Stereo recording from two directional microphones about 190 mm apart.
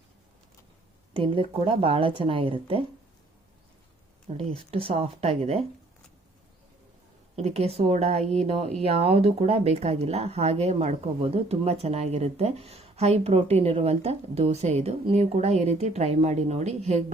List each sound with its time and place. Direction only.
1.1 s speech: 25° right (ahead or behind)
4.4 s speech: 30° right (ahead or behind)
7.3 s speech: 35° right (ahead or behind)